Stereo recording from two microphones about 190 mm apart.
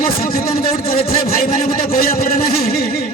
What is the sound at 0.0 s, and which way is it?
Speech, 50° left (ahead or behind).